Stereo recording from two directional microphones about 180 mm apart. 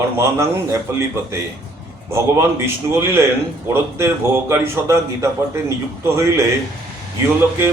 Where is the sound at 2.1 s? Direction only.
15° right (ahead or behind).